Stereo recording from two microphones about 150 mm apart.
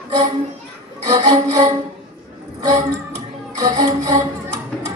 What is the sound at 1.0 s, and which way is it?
Music, 20° right (ahead or behind).